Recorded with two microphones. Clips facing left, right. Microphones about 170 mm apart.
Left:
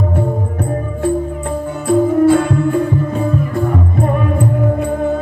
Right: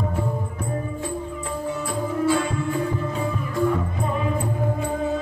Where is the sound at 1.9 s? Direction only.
60° left (ahead or behind).